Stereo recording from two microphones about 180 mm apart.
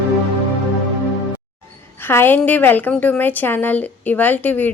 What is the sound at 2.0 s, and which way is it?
A woman's voice, 10° left (ahead or behind).